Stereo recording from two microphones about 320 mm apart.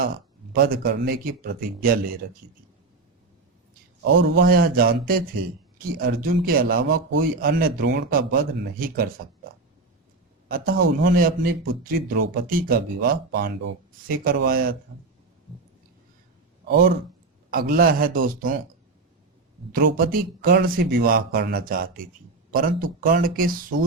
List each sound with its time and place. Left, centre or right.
0.6 s a man's voice: right
4.0 s a man's voice: right
10.5 s a man's voice: right
16.6 s a man's voice: right
19.7 s a man's voice: right